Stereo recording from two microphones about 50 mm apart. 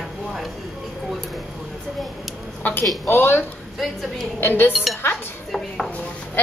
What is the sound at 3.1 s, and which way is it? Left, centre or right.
Speech, left.